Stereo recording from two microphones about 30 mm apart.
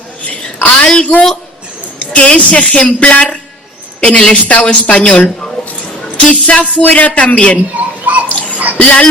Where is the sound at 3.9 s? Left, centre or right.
Left.